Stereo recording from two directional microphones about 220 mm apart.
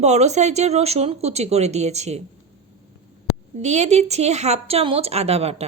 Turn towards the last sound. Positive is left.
turn(degrees=-30)  # may be behind; listen again after turning